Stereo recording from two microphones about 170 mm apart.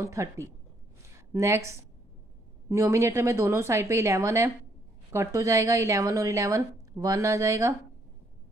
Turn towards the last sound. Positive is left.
turn(degrees=-20)  # may be behind; listen again after turning